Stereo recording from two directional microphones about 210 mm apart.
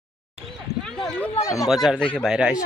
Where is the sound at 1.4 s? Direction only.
15° left (ahead or behind).